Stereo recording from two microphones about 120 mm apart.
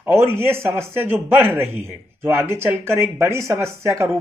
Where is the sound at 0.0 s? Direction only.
20° right (ahead or behind).